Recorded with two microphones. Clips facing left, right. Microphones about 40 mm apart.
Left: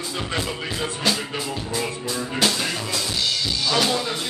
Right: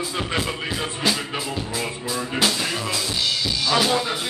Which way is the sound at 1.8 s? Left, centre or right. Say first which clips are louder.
Left 2 dB; centre.